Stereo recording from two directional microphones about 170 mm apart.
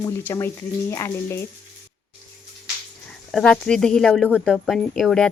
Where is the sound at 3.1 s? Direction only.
5° left (ahead or behind).